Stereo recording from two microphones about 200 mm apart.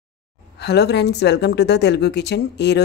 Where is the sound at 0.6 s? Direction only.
55° left (ahead or behind).